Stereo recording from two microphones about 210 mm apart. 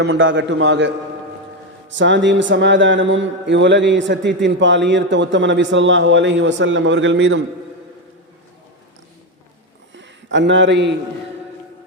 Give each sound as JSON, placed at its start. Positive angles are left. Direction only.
{"t": 0.0, "sound": "mantra", "side_deg": -60}
{"t": 1.9, "sound": "mantra", "side_deg": -60}
{"t": 10.0, "sound": "speech", "side_deg": -60}